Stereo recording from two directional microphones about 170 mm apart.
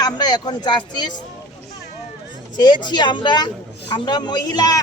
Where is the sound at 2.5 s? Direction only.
25° left (ahead or behind).